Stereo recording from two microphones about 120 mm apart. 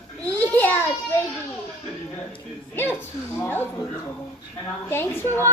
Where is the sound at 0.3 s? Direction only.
15° left (ahead or behind).